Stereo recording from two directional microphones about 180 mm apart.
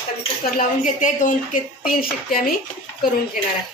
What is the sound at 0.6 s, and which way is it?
A woman's voice, 45° left (ahead or behind).